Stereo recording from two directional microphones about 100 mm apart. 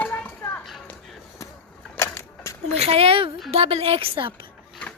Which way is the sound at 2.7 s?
90° right.